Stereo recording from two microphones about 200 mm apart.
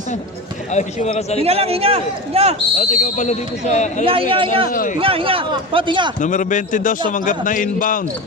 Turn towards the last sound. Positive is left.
turn(degrees=40)  # may be behind; listen again after turning